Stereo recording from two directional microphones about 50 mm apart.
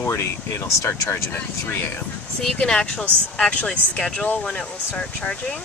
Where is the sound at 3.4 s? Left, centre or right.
Left.